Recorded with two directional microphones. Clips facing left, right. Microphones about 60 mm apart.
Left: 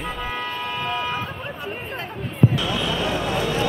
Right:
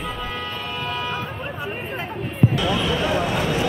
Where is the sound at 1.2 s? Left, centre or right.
Centre.